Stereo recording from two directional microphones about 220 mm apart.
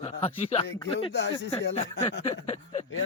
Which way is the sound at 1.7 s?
25° left (ahead or behind).